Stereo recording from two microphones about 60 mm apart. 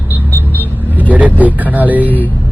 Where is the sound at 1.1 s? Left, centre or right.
Right.